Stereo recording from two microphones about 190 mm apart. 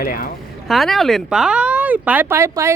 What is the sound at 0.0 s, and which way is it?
Speech, 50° left (ahead or behind).